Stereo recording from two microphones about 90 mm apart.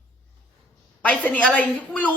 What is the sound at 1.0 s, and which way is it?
Speech, 15° left (ahead or behind).